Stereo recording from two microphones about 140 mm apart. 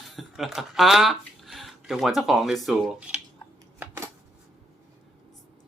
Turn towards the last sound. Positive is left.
turn(degrees=-15)  # may be behind; listen again after turning